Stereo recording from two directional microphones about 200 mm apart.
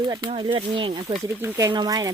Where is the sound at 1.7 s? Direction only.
20° right (ahead or behind).